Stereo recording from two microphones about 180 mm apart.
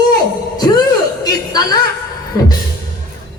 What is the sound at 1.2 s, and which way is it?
Music, 20° left (ahead or behind).